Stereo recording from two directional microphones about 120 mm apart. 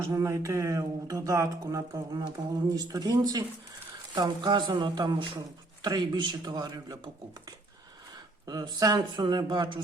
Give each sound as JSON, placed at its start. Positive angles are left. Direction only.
{"t": 0.0, "sound": "a man's voice", "side_deg": -25}
{"t": 8.4, "sound": "a man's voice", "side_deg": -35}